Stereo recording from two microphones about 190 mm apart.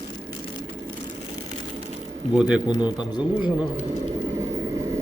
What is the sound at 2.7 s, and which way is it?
Speech, 20° left (ahead or behind).